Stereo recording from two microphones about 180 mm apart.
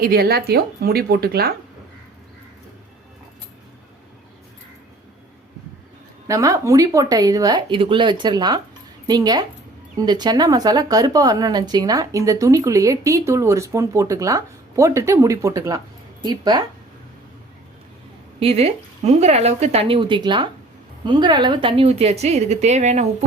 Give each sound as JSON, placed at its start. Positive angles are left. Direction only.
{"t": 0.0, "sound": "speech", "side_deg": -60}
{"t": 6.2, "sound": "a woman's voice", "side_deg": -15}
{"t": 18.3, "sound": "speech", "side_deg": -35}